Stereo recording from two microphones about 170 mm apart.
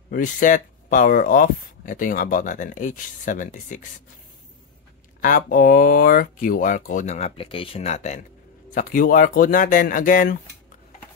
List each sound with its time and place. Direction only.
0.1 s speech: 50° left (ahead or behind)
5.2 s speech: 55° left (ahead or behind)
8.7 s speech: 55° left (ahead or behind)